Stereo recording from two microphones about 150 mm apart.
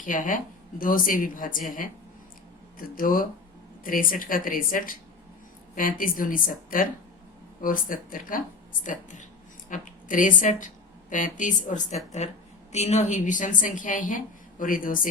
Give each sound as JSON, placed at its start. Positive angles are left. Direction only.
{"t": 0.0, "sound": "speech", "side_deg": 60}